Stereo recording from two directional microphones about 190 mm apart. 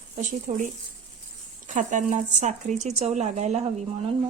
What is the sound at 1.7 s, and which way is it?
Speech, 40° right (ahead or behind).